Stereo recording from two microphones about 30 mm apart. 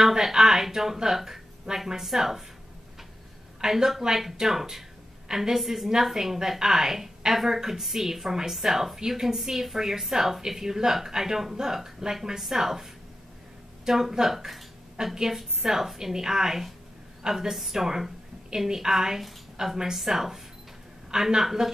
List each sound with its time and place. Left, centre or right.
0.2 s speech: centre
3.6 s speech: centre
5.6 s a woman's voice: centre
6.1 s speech: centre
15.0 s a woman's voice: right
15.6 s a woman's voice: centre